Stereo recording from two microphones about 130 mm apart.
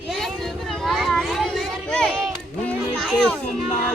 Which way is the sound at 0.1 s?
Centre (ahead or behind).